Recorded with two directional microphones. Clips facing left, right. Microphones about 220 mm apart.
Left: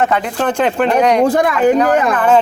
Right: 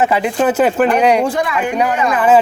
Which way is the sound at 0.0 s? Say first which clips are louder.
Right 2 dB; 5° right (ahead or behind).